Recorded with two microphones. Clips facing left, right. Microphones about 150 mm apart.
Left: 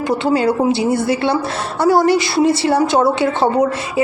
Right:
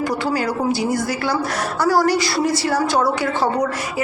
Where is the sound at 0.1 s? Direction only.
25° left (ahead or behind).